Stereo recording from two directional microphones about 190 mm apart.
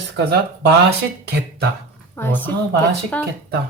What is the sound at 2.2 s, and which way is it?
A woman's voice, 10° left (ahead or behind).